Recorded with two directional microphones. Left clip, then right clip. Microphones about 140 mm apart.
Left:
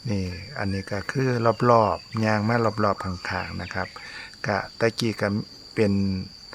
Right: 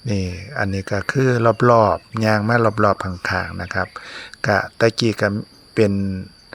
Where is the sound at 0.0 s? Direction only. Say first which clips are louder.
Right 5 dB; 25° right (ahead or behind).